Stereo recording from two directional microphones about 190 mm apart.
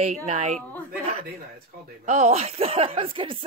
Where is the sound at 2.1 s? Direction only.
35° right (ahead or behind).